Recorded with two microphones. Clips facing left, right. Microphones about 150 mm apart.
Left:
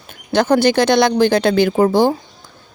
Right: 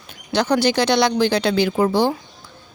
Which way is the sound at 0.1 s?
50° left (ahead or behind).